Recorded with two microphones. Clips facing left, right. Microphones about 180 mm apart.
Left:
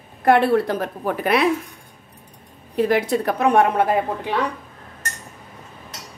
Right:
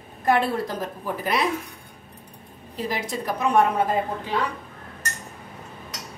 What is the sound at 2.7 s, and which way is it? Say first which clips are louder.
A woman's voice: left 10 dB; 60° left (ahead or behind).